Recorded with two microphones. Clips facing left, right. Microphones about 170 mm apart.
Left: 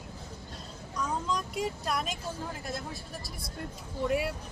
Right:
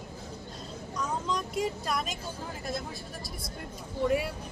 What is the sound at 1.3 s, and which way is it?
Speech, 5° left (ahead or behind).